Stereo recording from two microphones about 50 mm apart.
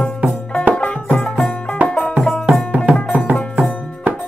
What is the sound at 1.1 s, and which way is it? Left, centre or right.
Music, centre.